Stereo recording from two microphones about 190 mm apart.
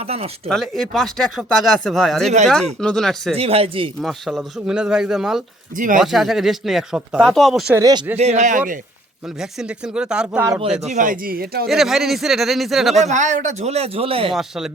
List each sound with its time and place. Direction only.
0.0 s a man's voice: 30° right (ahead or behind)
0.4 s speech: centre (ahead or behind)
3.3 s a man's voice: 30° right (ahead or behind)
4.0 s speech: centre (ahead or behind)
5.7 s speech: 45° right (ahead or behind)
6.0 s speech: centre (ahead or behind)
7.8 s speech: 20° right (ahead or behind)
8.1 s a man's voice: 35° right (ahead or behind)
9.4 s speech: 5° right (ahead or behind)
10.8 s speech: 40° right (ahead or behind)
11.7 s speech: centre (ahead or behind)
13.0 s a man's voice: 40° right (ahead or behind)
14.3 s speech: 5° right (ahead or behind)